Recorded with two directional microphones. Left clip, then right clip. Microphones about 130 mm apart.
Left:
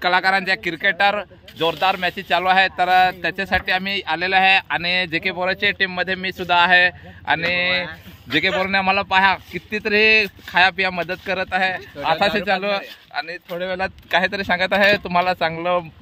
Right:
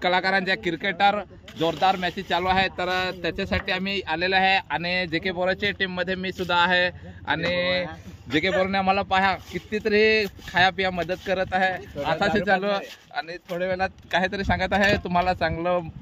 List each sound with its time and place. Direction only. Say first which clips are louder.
0.0 s speech: left 5 dB; 20° left (ahead or behind)